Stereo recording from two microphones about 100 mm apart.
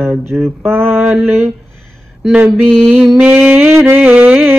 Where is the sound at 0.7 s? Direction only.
25° right (ahead or behind).